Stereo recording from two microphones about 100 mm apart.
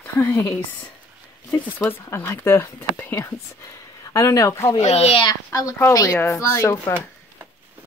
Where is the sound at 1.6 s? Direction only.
20° left (ahead or behind).